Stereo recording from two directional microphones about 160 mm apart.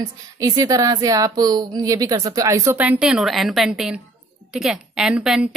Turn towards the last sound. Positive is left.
turn(degrees=-5)  # may be behind; listen again after turning